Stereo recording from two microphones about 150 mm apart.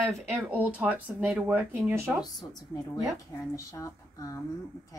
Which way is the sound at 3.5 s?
20° left (ahead or behind).